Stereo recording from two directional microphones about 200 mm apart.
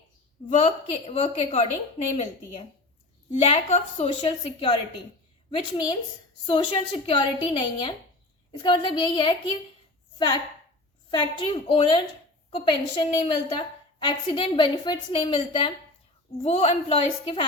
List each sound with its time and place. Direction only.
0.5 s a woman's voice: 30° left (ahead or behind)
3.3 s a woman's voice: 30° left (ahead or behind)
11.1 s a woman's voice: 25° left (ahead or behind)